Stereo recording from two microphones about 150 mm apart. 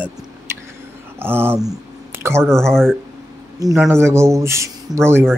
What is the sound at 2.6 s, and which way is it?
Speech, 5° left (ahead or behind).